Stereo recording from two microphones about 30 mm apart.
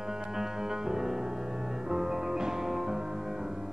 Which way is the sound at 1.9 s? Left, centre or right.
Centre.